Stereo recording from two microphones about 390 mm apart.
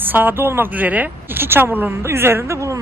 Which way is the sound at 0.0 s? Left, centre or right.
Centre.